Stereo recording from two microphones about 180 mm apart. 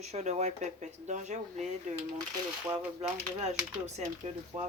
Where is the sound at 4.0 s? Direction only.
40° right (ahead or behind).